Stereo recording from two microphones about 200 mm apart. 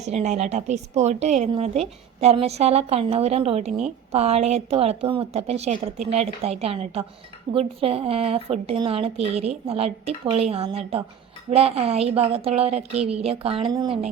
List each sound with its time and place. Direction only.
0.0 s a woman's voice: 35° right (ahead or behind)